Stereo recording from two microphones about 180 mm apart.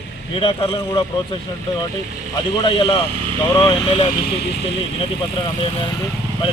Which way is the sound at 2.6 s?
25° left (ahead or behind).